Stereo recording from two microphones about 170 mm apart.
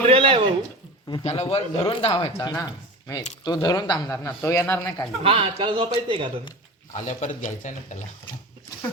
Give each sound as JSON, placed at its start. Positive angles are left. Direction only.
{"t": 0.1, "sound": "a sound", "side_deg": -30}
{"t": 1.2, "sound": "speech", "side_deg": 40}
{"t": 5.2, "sound": "a man's voice", "side_deg": -35}
{"t": 6.9, "sound": "speech", "side_deg": 45}